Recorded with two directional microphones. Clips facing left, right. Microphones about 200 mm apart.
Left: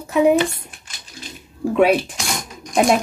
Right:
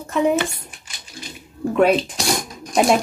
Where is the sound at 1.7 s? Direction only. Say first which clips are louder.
Left 1 dB; centre (ahead or behind).